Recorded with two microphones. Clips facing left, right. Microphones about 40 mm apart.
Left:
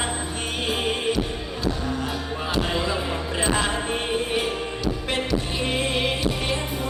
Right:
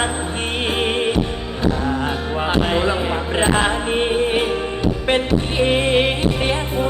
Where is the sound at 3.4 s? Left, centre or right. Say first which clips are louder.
Right 6 dB; right.